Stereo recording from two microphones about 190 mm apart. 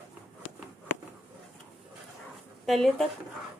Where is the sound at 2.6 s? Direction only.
Centre (ahead or behind).